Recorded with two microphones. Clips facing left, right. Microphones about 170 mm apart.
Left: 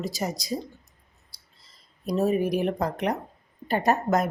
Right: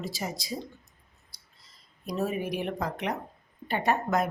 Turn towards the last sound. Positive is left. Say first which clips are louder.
# left 4 dB
turn(degrees=40)  # may be behind; listen again after turning